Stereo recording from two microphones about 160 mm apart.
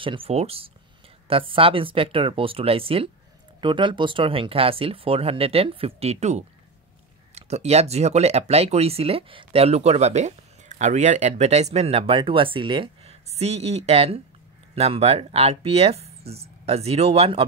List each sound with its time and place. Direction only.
0.0 s speech: 35° right (ahead or behind)